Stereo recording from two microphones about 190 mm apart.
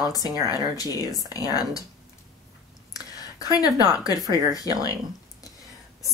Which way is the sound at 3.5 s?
20° left (ahead or behind).